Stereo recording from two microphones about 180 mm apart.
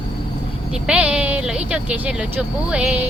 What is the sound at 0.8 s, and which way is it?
Speech, 5° right (ahead or behind).